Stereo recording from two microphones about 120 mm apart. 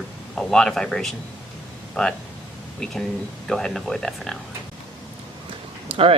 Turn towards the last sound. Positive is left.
turn(degrees=-50)  # may be behind; listen again after turning